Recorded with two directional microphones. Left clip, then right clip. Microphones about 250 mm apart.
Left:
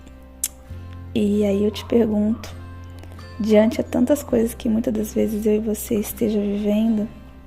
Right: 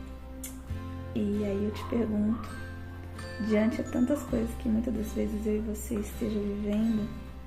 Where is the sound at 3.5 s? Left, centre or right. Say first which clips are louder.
Left 12 dB; left.